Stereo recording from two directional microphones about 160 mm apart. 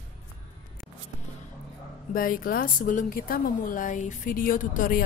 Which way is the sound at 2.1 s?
60° left (ahead or behind).